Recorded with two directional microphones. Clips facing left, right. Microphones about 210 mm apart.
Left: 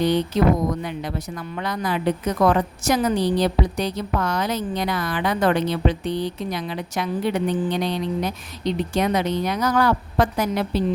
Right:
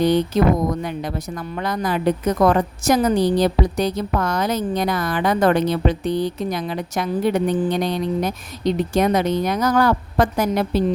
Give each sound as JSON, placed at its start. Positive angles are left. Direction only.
{"t": 0.8, "sound": "speech", "side_deg": -45}